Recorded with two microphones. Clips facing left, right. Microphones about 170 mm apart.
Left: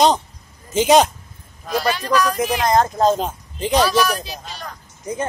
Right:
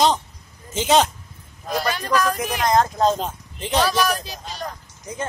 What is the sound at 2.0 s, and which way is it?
Speech, 50° right (ahead or behind).